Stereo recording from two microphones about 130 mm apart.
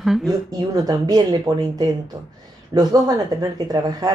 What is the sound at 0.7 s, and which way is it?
Speech, 30° right (ahead or behind).